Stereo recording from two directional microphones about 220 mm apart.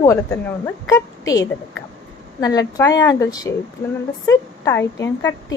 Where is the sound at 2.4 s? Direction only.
15° left (ahead or behind).